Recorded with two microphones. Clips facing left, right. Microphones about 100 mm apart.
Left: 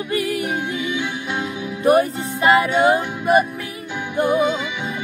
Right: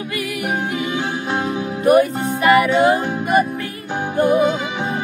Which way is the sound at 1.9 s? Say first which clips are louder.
Right 2 dB; 25° left (ahead or behind).